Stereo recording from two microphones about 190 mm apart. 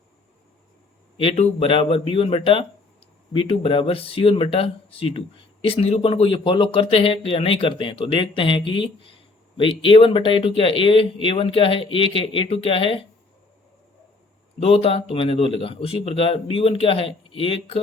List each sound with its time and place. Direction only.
1.1 s speech: 30° left (ahead or behind)
14.6 s speech: 30° left (ahead or behind)